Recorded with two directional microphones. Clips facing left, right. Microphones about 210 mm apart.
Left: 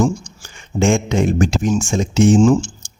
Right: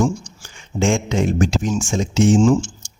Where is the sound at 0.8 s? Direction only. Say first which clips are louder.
Left 3 dB; 55° left (ahead or behind).